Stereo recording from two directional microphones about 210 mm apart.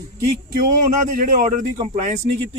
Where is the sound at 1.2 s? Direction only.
40° right (ahead or behind).